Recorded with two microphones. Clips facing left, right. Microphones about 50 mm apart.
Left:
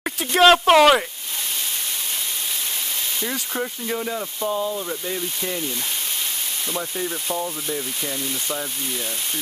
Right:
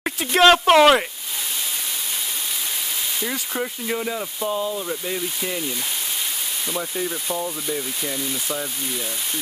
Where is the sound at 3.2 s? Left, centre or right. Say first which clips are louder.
Even; centre.